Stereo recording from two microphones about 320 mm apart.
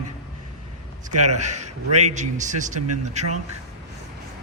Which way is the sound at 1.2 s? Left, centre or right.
Right.